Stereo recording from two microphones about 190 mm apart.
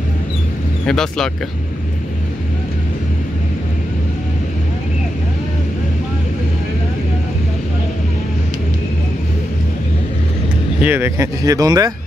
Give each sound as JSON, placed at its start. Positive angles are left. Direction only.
{"t": 0.8, "sound": "speech", "side_deg": 5}
{"t": 10.8, "sound": "speech", "side_deg": -10}